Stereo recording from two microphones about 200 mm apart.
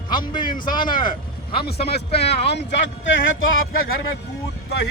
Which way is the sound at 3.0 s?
70° left (ahead or behind).